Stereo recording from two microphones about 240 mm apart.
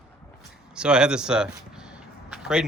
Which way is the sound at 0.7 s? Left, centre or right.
Centre.